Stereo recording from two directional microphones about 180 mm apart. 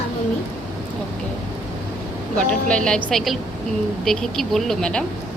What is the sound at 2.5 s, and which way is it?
Speech, 5° left (ahead or behind).